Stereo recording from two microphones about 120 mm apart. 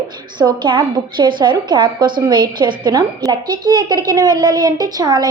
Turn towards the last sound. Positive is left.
turn(degrees=-30)  # may be behind; listen again after turning